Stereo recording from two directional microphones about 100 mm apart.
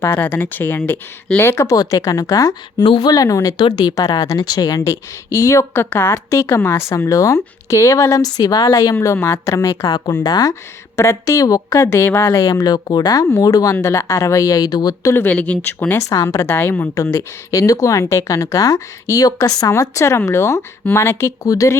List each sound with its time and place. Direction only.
0.0 s a woman's voice: 20° left (ahead or behind)
1.4 s a woman's voice: 25° left (ahead or behind)
2.8 s speech: 60° left (ahead or behind)
3.1 s a woman's voice: 35° left (ahead or behind)
3.6 s a woman's voice: 45° left (ahead or behind)
10.5 s a woman's voice: 30° left (ahead or behind)
15.1 s speech: 20° left (ahead or behind)
16.0 s a woman's voice: 35° left (ahead or behind)
16.5 s a woman's voice: 20° left (ahead or behind)
16.9 s a woman's voice: 30° left (ahead or behind)